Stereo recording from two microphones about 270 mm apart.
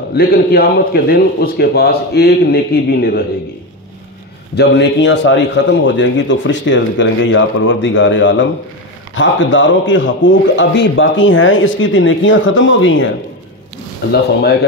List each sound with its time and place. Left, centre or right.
0.1 s a man's voice: left
4.6 s a man's voice: left